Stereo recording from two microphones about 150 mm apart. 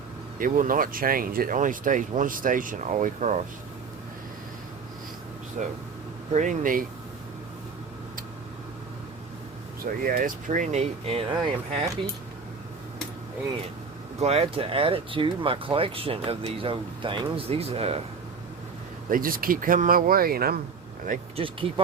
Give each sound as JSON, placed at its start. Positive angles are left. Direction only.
{"t": 0.3, "sound": "speech", "side_deg": -65}
{"t": 5.6, "sound": "speech", "side_deg": -60}
{"t": 9.8, "sound": "speech", "side_deg": -70}
{"t": 14.2, "sound": "speech", "side_deg": -45}
{"t": 19.1, "sound": "speech", "side_deg": -70}
{"t": 21.3, "sound": "speech", "side_deg": -35}